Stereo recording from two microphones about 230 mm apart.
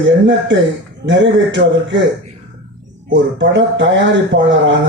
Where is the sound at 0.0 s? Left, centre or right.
Right.